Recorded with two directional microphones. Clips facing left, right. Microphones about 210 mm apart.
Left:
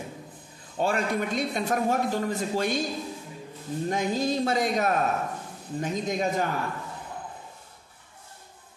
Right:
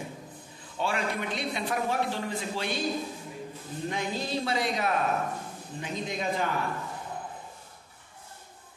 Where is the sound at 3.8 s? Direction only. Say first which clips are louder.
Left 6 dB; 45° left (ahead or behind).